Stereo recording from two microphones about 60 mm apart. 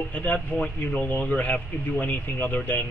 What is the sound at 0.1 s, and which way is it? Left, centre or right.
A man's voice, left.